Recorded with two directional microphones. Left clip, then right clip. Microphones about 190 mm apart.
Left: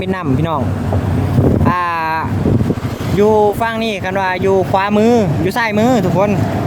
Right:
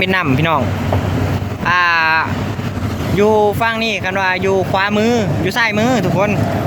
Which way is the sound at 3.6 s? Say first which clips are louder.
Right 1 dB; 25° left (ahead or behind).